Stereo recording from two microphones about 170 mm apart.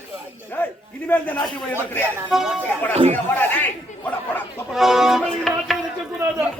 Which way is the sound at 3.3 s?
10° left (ahead or behind).